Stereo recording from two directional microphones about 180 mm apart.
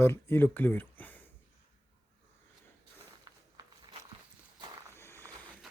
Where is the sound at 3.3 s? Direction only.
25° right (ahead or behind).